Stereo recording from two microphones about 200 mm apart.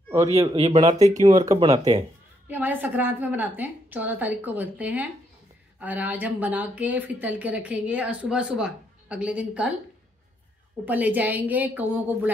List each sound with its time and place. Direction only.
0.1 s a man's voice: 15° right (ahead or behind)
0.6 s speech: 25° right (ahead or behind)
2.4 s speech: 10° right (ahead or behind)
10.9 s speech: 10° right (ahead or behind)